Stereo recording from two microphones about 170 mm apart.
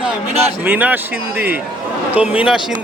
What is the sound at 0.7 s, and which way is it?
Speech, 10° right (ahead or behind).